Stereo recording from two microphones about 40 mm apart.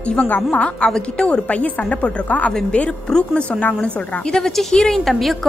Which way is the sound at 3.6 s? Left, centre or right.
Left.